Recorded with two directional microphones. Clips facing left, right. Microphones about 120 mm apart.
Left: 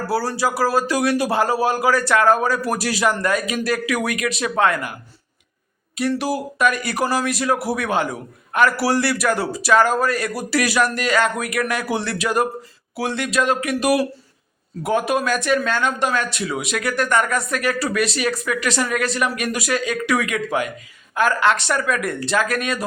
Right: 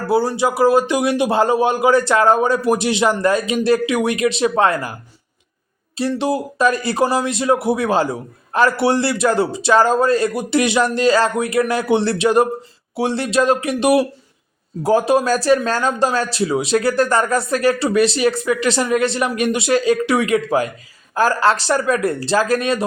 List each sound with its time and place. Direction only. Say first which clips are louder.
0.1 s speech: right 6 dB; 20° right (ahead or behind)
6.0 s speech: right 2 dB; 25° right (ahead or behind)